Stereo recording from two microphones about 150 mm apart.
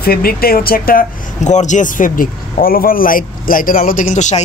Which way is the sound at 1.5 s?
55° left (ahead or behind).